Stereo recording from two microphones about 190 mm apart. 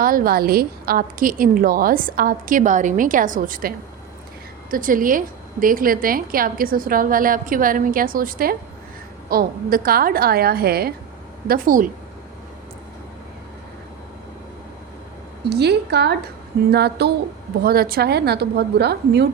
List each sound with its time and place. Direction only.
0.0 s a woman's voice: 50° right (ahead or behind)
15.4 s a woman's voice: 60° right (ahead or behind)